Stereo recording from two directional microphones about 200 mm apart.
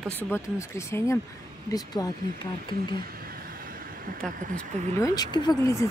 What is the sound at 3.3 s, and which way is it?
Vehicle, 45° right (ahead or behind).